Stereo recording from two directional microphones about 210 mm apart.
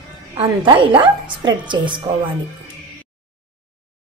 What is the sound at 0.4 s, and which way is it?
A woman's voice, 25° right (ahead or behind).